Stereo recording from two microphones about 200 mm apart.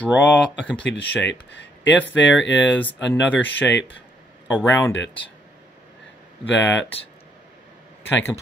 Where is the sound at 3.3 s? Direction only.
10° left (ahead or behind).